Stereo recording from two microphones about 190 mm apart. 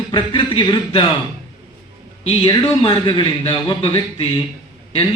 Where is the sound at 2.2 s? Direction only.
30° left (ahead or behind).